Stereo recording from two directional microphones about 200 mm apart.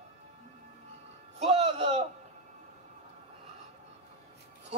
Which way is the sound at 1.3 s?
30° right (ahead or behind).